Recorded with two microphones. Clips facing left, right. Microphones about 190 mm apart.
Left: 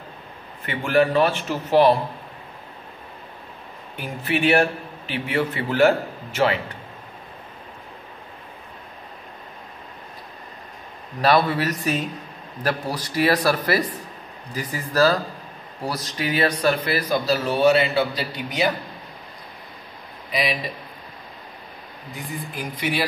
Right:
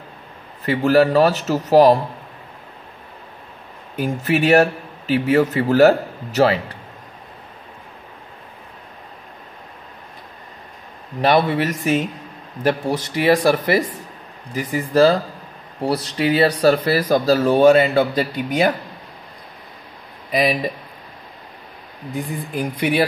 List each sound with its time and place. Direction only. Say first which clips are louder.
0.7 s a man's voice: right 5 dB; 40° right (ahead or behind)
3.9 s a man's voice: right 6 dB; 40° right (ahead or behind)
11.1 s a man's voice: right 3 dB; 20° right (ahead or behind); by 18.7 s 50° right (ahead or behind)
20.2 s speech: right 6 dB; 45° right (ahead or behind)
22.1 s speech: right 7 dB; 55° right (ahead or behind)